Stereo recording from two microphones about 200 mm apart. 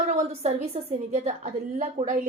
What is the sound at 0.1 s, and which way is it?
A woman's voice, 35° right (ahead or behind).